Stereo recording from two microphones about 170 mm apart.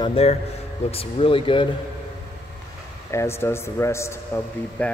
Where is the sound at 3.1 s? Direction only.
15° left (ahead or behind).